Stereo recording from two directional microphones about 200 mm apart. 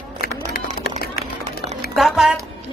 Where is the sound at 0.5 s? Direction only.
50° left (ahead or behind).